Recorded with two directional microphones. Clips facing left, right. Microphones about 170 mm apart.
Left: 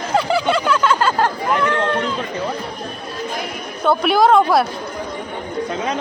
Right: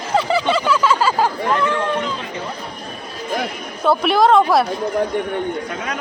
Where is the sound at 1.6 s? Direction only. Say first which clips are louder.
Left 1 dB; 5° right (ahead or behind).